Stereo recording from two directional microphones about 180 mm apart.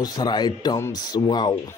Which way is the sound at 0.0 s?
20° left (ahead or behind).